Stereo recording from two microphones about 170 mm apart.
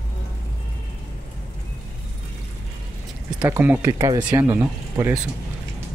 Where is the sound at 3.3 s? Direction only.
25° right (ahead or behind).